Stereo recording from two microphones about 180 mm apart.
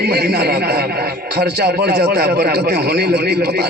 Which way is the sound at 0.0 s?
60° right (ahead or behind).